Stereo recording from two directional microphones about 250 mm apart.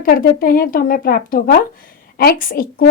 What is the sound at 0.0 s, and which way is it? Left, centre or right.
Speech, left.